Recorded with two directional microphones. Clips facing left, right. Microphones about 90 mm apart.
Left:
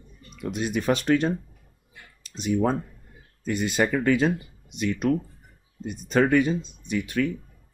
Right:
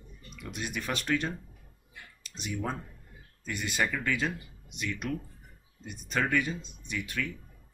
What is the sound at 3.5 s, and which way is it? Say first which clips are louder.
Speech: left 8 dB; 30° left (ahead or behind).